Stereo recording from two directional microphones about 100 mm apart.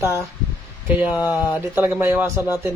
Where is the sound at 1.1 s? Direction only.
20° right (ahead or behind).